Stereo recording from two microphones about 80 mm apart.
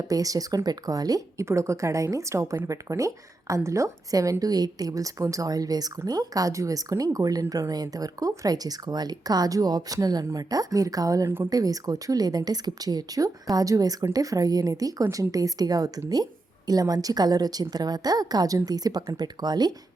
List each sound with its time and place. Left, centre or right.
0.0 s speech: right
1.5 s a woman's voice: right